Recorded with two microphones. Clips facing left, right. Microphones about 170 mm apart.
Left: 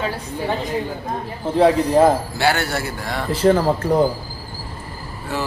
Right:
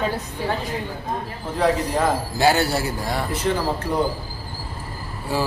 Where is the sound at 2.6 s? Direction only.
35° right (ahead or behind).